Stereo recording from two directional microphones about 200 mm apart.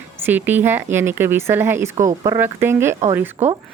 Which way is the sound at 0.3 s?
10° right (ahead or behind).